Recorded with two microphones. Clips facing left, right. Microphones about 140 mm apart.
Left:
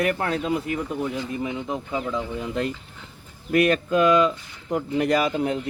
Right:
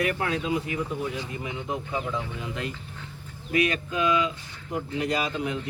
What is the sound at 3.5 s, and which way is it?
Speech, 55° left (ahead or behind).